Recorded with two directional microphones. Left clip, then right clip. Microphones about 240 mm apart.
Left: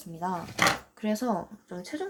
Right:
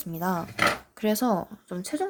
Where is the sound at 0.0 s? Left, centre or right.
Right.